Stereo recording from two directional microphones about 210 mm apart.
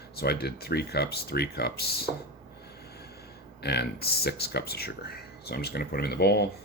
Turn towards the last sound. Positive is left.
turn(degrees=50)  # may be behind; listen again after turning